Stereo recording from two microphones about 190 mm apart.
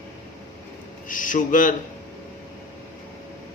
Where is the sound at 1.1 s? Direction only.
45° left (ahead or behind).